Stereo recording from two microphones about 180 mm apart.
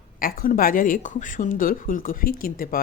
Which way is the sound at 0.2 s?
50° left (ahead or behind).